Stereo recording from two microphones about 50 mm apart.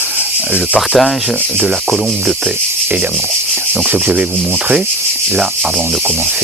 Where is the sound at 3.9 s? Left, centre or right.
Right.